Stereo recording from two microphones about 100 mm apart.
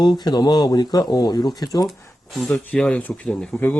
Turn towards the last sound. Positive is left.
turn(degrees=5)  # may be behind; listen again after turning